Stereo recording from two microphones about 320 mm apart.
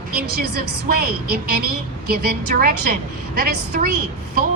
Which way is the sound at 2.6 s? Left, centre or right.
Right.